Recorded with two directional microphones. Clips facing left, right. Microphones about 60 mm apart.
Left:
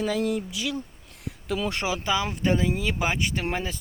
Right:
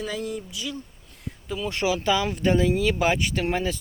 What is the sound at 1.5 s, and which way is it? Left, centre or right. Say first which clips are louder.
Speech: left 2 dB; left.